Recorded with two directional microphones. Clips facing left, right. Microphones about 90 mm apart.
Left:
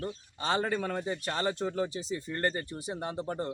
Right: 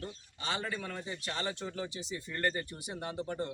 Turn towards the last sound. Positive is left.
turn(degrees=35)  # may be behind; listen again after turning